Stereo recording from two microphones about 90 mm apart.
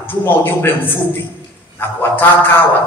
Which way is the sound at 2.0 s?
20° left (ahead or behind).